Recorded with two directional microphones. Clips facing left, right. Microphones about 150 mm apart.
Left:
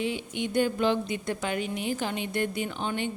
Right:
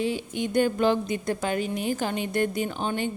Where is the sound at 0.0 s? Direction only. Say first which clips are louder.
Right 3 dB; 40° right (ahead or behind).